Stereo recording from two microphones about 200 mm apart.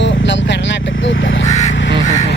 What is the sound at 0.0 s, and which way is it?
Vehicle, 65° left (ahead or behind).